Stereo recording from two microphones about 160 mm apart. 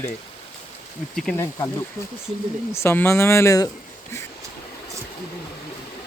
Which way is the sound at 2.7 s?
15° left (ahead or behind).